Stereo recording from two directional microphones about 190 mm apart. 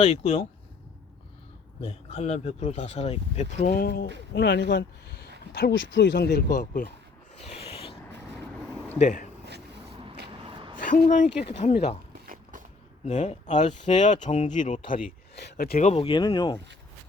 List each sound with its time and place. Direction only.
0.0 s speech: 30° left (ahead or behind)
1.8 s speech: 35° left (ahead or behind); by 4.0 s 55° left (ahead or behind)
4.4 s speech: 65° left (ahead or behind)
7.4 s a sound: 30° left (ahead or behind)
9.0 s speech: 40° left (ahead or behind)
10.8 s speech: 40° left (ahead or behind)
12.3 s skateboard: 45° right (ahead or behind)
13.1 s speech: 40° left (ahead or behind)
15.9 s speech: 30° left (ahead or behind)